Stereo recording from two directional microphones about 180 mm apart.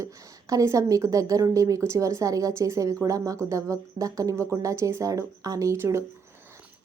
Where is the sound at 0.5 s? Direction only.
15° right (ahead or behind).